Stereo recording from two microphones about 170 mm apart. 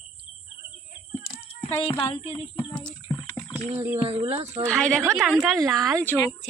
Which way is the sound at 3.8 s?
10° right (ahead or behind).